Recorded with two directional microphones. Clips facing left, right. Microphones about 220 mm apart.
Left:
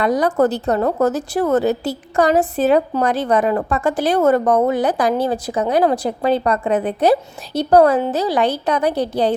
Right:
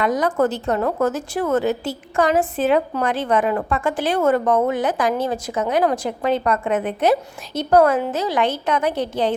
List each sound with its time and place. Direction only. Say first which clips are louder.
0.0 s a woman's voice: left 3 dB; 35° left (ahead or behind)